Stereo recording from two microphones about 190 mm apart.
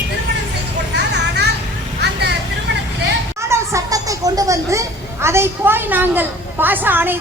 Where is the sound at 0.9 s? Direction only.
60° right (ahead or behind).